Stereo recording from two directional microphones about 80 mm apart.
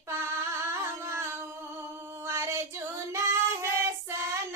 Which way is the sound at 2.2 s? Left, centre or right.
Right.